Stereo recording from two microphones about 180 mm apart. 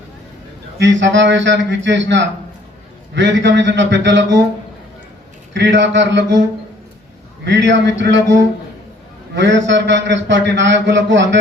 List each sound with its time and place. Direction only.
0.8 s a man's voice: 85° right
5.5 s a man's voice: 80° right
7.4 s a man's voice: 75° right (ahead or behind)